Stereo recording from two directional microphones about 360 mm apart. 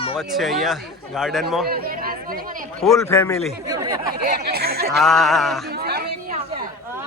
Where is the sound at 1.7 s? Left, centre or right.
Right.